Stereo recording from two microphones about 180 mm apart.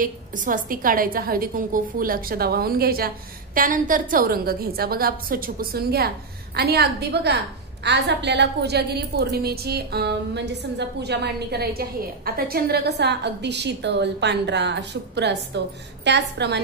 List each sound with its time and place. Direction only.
0.0 s a woman's voice: 50° right (ahead or behind); by 16.6 s 70° right (ahead or behind)